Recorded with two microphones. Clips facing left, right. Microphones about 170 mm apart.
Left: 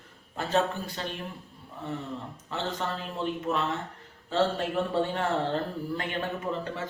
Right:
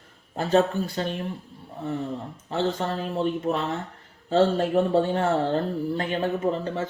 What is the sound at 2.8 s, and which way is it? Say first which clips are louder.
Speech: right 6 dB; 40° right (ahead or behind).